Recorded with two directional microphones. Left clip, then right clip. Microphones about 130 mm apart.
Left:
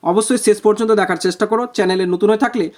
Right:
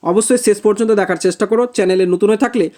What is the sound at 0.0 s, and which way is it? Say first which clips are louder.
Speech: right 2 dB; 15° right (ahead or behind).